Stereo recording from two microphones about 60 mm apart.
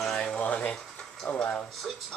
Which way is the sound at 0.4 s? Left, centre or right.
Left.